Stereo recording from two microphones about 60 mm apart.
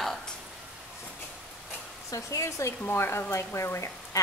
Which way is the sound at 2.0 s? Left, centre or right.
Left.